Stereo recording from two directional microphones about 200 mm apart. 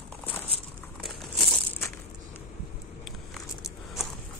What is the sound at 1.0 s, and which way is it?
Crumpling, centre (ahead or behind).